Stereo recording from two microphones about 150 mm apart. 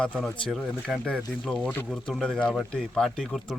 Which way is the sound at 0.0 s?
5° left (ahead or behind).